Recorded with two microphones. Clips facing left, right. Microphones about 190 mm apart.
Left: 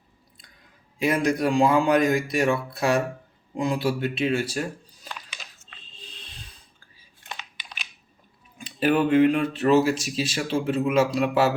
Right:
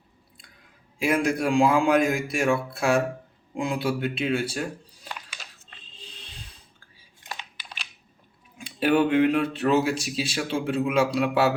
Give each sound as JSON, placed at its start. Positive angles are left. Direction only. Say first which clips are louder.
{"t": 0.9, "sound": "speech", "louder": "left 1 dB", "side_deg": -5}
{"t": 7.2, "sound": "computer keyboard", "louder": "right 1 dB", "side_deg": -15}
{"t": 8.5, "sound": "speech", "louder": "even", "side_deg": 0}